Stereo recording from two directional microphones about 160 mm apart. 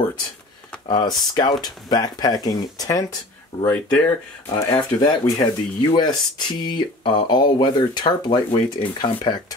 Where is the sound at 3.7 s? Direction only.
10° left (ahead or behind).